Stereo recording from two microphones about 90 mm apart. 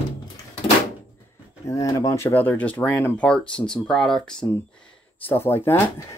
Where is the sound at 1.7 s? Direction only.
35° left (ahead or behind); by 4.5 s 5° left (ahead or behind).